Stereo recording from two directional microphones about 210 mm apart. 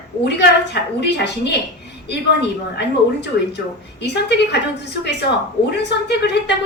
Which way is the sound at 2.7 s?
55° left (ahead or behind).